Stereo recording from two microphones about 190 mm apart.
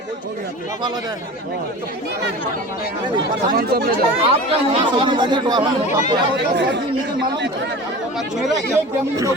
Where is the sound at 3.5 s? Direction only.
55° right (ahead or behind).